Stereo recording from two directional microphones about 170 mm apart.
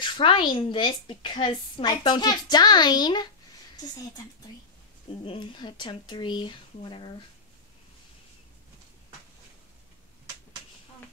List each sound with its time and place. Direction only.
0.0 s a woman's voice: 30° left (ahead or behind)
5.2 s a woman's voice: 30° left (ahead or behind)